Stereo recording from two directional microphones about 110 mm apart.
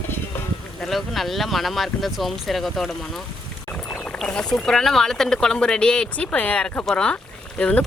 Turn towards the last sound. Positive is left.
turn(degrees=10)  # may be behind; listen again after turning